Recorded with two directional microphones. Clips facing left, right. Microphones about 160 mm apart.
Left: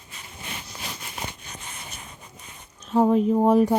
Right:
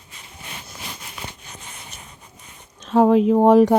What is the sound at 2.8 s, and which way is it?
Speech, 90° right.